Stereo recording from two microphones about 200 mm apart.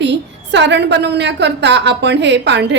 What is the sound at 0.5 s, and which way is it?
A woman's voice, 60° right (ahead or behind).